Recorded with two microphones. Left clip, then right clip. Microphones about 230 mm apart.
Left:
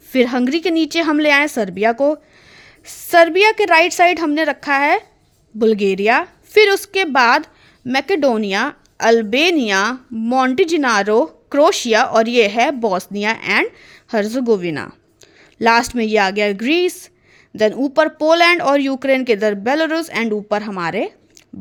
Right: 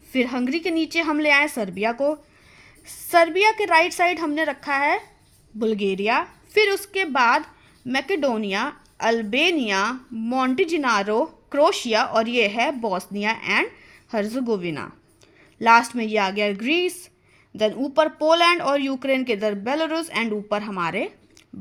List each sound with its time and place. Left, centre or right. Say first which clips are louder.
0.1 s a woman's voice: left 8 dB; left